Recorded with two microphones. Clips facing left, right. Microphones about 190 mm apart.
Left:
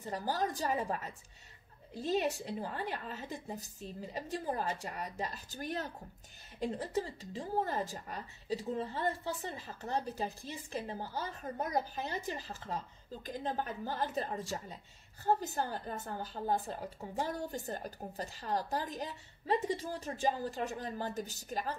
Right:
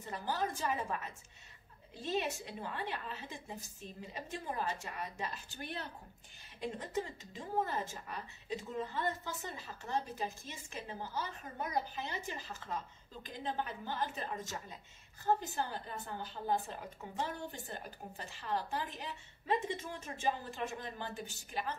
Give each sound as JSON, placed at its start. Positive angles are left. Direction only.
{"t": 0.0, "sound": "speech", "side_deg": 35}